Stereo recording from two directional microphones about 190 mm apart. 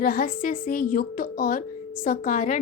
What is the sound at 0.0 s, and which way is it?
A woman's voice, 45° left (ahead or behind).